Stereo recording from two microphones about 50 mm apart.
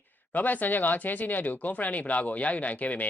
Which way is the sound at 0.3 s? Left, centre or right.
Left.